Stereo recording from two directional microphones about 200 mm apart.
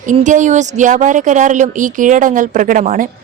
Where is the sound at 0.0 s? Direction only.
40° right (ahead or behind).